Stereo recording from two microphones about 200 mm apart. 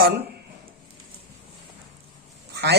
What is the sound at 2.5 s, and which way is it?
Quack, 55° right (ahead or behind).